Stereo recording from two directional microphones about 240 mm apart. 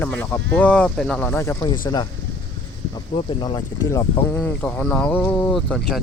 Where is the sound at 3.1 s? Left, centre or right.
Left.